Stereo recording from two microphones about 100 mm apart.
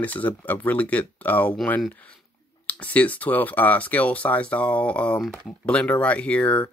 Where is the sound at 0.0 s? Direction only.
15° left (ahead or behind).